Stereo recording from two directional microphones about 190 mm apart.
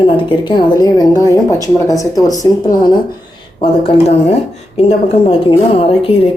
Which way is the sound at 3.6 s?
30° left (ahead or behind).